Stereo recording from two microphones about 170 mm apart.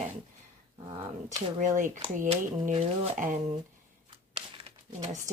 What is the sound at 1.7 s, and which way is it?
Speech, 50° right (ahead or behind).